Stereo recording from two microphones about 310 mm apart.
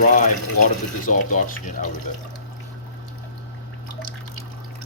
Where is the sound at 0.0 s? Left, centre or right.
Left.